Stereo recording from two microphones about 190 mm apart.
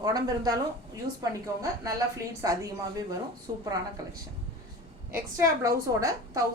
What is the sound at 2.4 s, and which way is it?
Speech, 15° right (ahead or behind).